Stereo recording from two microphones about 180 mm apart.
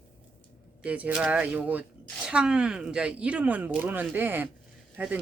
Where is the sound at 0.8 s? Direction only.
10° right (ahead or behind).